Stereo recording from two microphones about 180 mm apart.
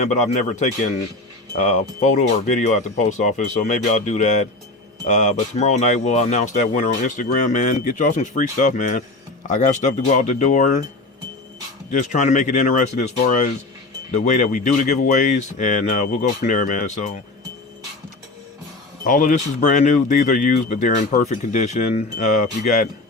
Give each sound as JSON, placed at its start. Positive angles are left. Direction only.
{"t": 0.0, "sound": "speech", "side_deg": 40}
{"t": 11.9, "sound": "speech", "side_deg": 45}
{"t": 19.0, "sound": "speech", "side_deg": 45}